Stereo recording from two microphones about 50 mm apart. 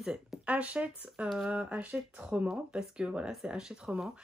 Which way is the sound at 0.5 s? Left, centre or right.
Right.